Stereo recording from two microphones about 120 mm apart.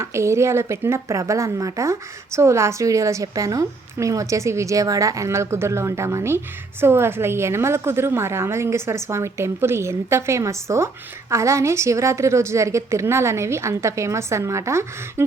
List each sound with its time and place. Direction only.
0.0 s speech: 25° right (ahead or behind)